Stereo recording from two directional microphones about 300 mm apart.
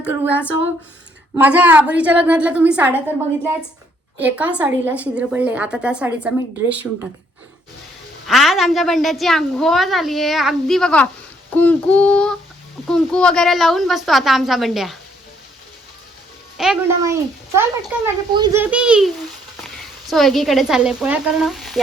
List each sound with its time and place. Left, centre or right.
0.0 s a woman's voice: centre
4.2 s a woman's voice: centre
8.3 s a woman's voice: centre
16.6 s a child's voice: centre